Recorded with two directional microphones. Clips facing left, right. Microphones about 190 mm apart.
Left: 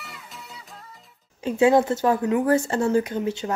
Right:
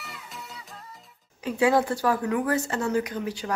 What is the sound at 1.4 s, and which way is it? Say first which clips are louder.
Speech: left 4 dB; 25° left (ahead or behind).